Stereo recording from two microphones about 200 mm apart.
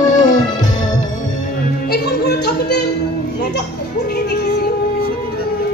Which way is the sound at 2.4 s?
55° left (ahead or behind).